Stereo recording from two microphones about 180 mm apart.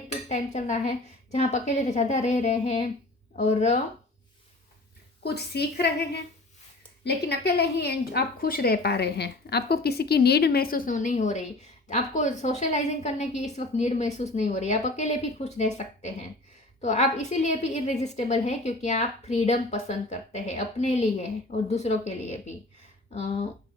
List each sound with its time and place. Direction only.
0.1 s a woman's voice: 40° left (ahead or behind)
5.2 s a woman's voice: 65° left (ahead or behind)
7.0 s a woman's voice: 65° left (ahead or behind); by 23.5 s 35° left (ahead or behind)